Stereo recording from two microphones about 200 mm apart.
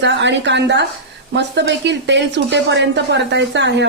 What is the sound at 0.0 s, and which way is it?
Speech, 60° right (ahead or behind).